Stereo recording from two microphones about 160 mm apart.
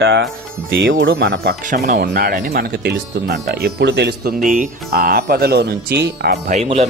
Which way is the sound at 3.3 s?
90° right.